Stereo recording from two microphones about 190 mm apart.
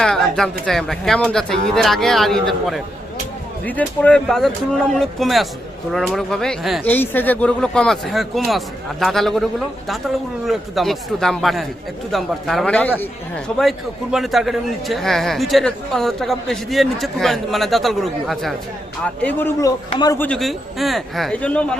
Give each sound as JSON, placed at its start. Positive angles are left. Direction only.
{"t": 0.0, "sound": "a sound", "side_deg": 5}
{"t": 0.6, "sound": "a man's voice", "side_deg": 0}
{"t": 6.9, "sound": "a man's voice", "side_deg": 10}
{"t": 20.2, "sound": "a man's voice", "side_deg": 5}